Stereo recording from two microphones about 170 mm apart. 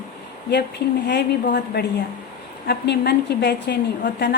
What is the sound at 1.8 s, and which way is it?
A woman's voice, 75° left (ahead or behind).